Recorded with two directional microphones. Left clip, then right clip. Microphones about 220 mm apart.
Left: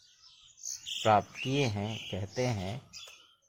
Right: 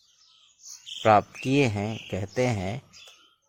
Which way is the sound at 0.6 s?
50° left (ahead or behind).